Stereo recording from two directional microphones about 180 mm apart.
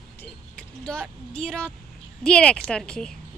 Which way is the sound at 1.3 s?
5° left (ahead or behind).